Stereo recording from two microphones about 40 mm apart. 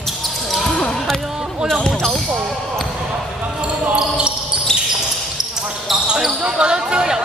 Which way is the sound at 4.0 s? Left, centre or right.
Right.